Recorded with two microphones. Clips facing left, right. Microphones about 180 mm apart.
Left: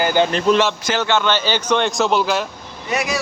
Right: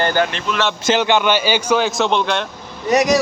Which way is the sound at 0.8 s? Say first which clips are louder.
Right 3 dB; 20° right (ahead or behind).